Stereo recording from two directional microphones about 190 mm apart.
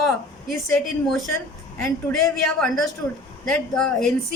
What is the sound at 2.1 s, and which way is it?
Speech, centre (ahead or behind).